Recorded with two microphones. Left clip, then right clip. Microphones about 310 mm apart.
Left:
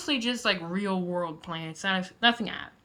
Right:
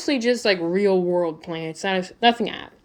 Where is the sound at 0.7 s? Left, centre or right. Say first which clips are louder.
Right 12 dB; left.